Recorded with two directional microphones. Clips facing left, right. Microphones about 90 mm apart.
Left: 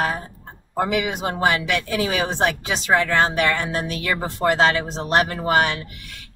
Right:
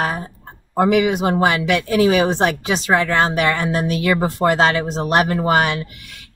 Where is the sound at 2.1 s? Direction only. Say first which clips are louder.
Right 5 dB; 20° right (ahead or behind).